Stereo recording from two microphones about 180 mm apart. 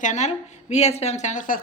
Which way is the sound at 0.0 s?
40° left (ahead or behind).